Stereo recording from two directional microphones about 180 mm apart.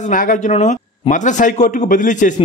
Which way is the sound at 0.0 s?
50° left (ahead or behind).